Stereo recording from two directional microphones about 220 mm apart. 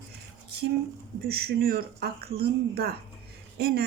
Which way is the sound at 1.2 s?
45° right (ahead or behind).